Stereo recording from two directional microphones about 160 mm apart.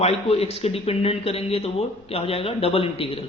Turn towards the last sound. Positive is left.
turn(degrees=35)  # may be behind; listen again after turning